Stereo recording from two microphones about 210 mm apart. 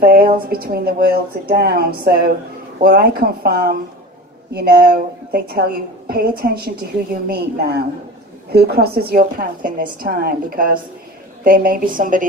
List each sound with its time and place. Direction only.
0.0 s a woman's voice: 45° right (ahead or behind)